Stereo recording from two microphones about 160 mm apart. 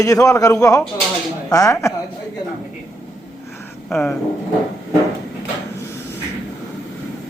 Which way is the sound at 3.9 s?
5° left (ahead or behind).